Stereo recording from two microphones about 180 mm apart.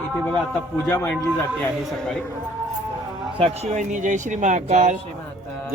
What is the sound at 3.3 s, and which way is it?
Speech, 35° right (ahead or behind).